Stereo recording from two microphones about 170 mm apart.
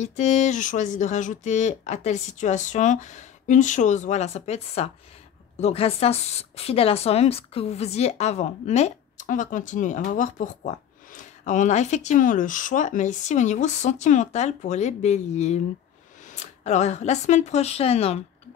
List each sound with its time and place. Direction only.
0.0 s a woman's voice: 40° left (ahead or behind)